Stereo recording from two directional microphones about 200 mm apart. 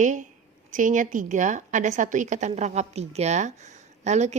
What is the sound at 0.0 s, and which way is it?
A woman's voice, 40° right (ahead or behind).